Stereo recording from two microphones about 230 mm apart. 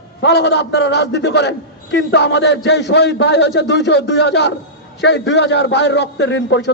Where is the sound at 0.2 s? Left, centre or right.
Left.